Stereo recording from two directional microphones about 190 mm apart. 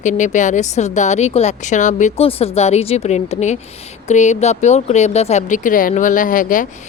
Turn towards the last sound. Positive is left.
turn(degrees=45)  # may be behind; listen again after turning